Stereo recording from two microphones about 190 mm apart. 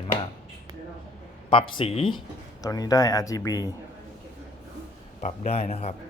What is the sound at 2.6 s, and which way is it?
Speech, 20° left (ahead or behind).